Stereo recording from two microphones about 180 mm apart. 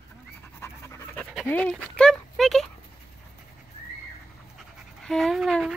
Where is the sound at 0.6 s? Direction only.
15° left (ahead or behind).